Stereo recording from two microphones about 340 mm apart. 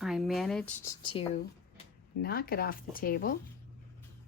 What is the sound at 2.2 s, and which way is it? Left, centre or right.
Speech, left.